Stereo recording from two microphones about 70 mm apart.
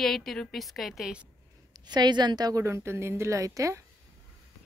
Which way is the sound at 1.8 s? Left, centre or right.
Right.